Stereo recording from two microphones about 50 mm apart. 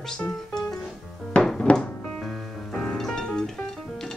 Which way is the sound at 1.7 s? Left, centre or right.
Left.